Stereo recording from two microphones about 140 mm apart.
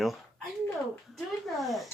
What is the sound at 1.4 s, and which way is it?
Speech, centre (ahead or behind).